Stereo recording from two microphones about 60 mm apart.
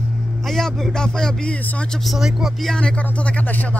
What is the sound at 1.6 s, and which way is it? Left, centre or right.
Speech, left.